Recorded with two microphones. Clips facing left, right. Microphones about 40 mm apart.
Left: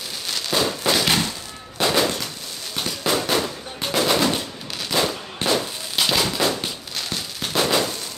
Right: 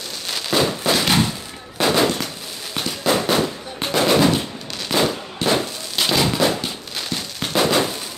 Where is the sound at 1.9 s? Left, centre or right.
Right.